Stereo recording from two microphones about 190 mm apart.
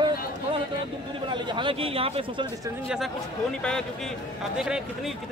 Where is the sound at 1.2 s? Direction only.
25° right (ahead or behind).